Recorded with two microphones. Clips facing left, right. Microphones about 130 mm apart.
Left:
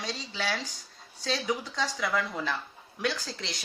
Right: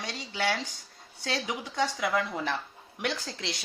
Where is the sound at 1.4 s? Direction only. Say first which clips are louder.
Right 1 dB; 20° right (ahead or behind).